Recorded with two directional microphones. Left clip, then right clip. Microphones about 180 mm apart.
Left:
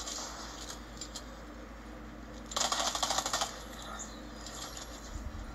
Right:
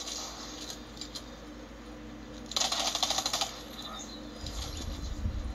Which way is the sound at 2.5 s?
10° left (ahead or behind).